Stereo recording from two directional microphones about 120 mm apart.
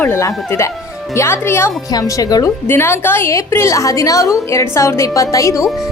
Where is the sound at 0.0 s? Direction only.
25° left (ahead or behind).